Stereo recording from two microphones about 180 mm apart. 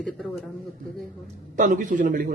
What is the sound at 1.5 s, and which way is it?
Speech, 45° right (ahead or behind).